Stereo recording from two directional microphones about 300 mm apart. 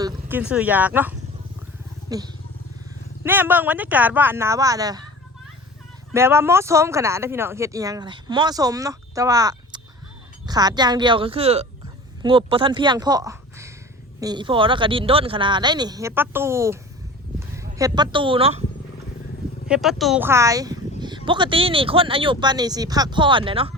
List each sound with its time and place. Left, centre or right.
0.0 s speech: centre
2.0 s vehicle: centre
3.2 s speech: centre
6.1 s a woman's voice: centre
19.6 s speech: centre